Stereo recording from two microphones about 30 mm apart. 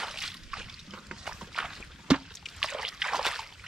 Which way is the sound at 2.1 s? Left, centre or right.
Right.